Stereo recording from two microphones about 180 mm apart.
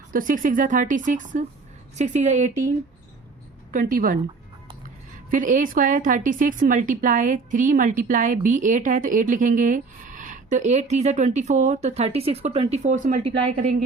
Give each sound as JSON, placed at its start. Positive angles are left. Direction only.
{"t": 0.1, "sound": "a woman's voice", "side_deg": -50}
{"t": 3.7, "sound": "a woman's voice", "side_deg": -50}
{"t": 5.3, "sound": "a woman's voice", "side_deg": -45}